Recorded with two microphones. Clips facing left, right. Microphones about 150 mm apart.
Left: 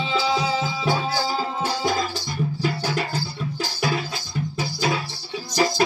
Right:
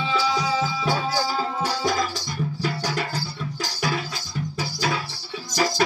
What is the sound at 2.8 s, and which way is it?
Music, 30° left (ahead or behind).